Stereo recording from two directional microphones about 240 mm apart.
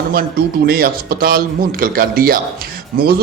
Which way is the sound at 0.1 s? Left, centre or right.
Right.